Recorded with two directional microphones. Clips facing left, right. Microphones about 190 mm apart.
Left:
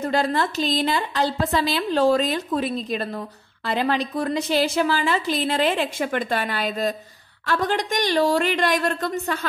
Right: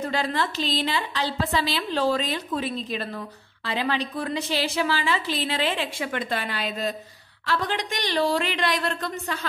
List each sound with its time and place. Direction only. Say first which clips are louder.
0.1 s a woman's voice: left 4 dB; 45° left (ahead or behind)